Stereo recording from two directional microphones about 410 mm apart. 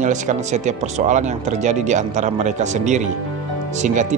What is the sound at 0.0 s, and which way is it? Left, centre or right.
Speech, centre.